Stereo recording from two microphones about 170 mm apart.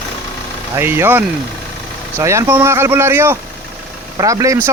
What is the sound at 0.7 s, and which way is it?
Speech, 15° right (ahead or behind).